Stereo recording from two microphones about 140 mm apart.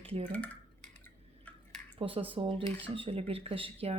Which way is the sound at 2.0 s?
40° right (ahead or behind).